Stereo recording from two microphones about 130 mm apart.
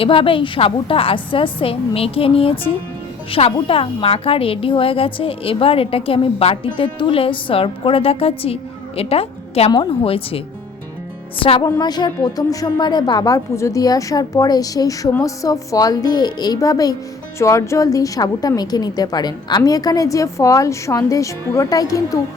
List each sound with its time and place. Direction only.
0.0 s a woman's voice: 45° left (ahead or behind)
11.6 s a woman's voice: 30° left (ahead or behind)